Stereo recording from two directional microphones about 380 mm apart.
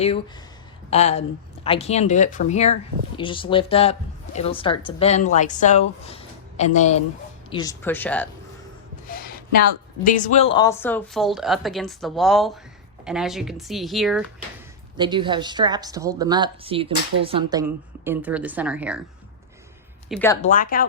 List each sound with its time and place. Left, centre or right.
0.9 s a woman's voice: centre
9.0 s a sound: left
10.0 s speech: centre
14.9 s a woman's voice: centre
20.1 s speech: centre
20.4 s speech: left